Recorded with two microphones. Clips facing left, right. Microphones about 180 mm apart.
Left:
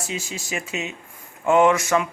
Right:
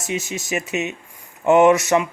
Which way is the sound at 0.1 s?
20° right (ahead or behind).